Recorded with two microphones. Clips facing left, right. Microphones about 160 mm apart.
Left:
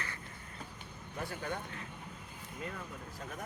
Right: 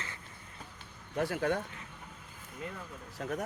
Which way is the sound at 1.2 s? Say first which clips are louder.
Right 9 dB; 85° right.